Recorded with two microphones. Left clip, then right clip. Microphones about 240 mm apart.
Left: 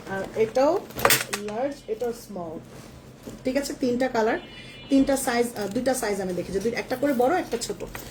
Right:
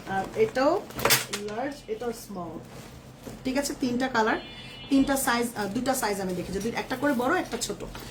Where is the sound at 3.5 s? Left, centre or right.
Centre.